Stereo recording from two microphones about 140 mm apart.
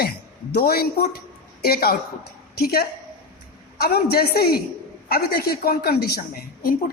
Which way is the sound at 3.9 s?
90° left.